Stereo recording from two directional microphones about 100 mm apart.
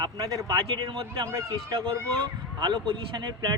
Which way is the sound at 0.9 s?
45° right (ahead or behind).